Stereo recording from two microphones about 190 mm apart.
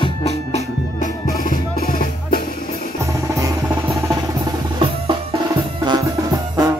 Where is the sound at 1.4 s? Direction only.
50° left (ahead or behind).